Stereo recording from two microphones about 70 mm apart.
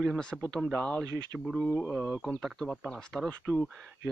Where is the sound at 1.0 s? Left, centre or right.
Right.